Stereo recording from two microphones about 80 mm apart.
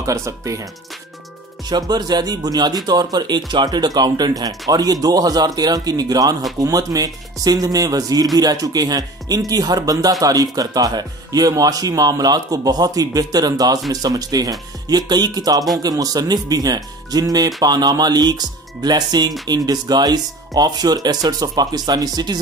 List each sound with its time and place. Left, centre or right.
0.0 s speech: right
1.7 s speech: right